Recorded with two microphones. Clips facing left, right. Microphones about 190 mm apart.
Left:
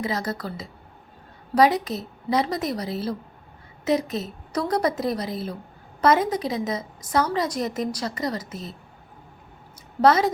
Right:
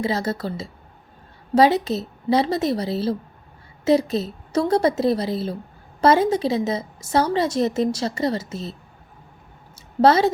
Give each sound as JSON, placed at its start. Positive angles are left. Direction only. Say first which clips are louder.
{"t": 0.0, "sound": "a woman's voice", "louder": "right 4 dB", "side_deg": -30}
{"t": 10.0, "sound": "a woman's voice", "louder": "right 3 dB", "side_deg": -30}